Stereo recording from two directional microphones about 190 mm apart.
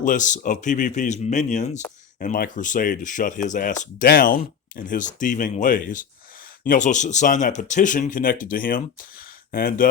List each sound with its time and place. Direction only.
0.0 s speech: 40° left (ahead or behind)